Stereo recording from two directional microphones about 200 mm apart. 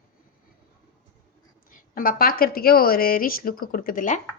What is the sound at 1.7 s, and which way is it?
A woman's voice, 45° left (ahead or behind).